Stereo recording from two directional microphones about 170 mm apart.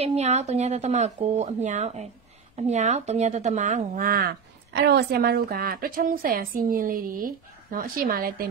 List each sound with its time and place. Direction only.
0.0 s a woman's voice: 40° right (ahead or behind); by 4.3 s 55° right (ahead or behind)
4.7 s a woman's voice: 70° right (ahead or behind)